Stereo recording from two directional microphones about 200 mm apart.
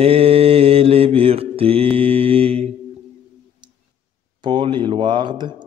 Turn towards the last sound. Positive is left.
turn(degrees=-25)  # may be behind; listen again after turning